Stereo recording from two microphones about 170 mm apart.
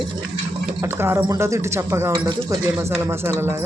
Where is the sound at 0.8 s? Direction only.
15° right (ahead or behind).